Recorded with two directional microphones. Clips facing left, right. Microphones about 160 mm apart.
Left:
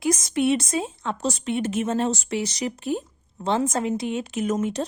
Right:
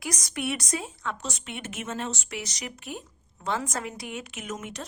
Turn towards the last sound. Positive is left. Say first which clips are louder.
# left 12 dB
turn(degrees=30)  # may be behind; listen again after turning